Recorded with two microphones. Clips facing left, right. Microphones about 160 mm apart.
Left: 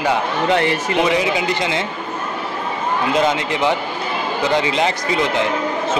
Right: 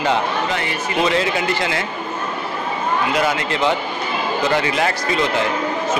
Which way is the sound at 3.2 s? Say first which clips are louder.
Left 1 dB; 20° left (ahead or behind).